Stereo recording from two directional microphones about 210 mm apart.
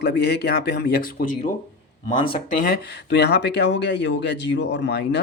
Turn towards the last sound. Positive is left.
turn(degrees=55)  # may be behind; listen again after turning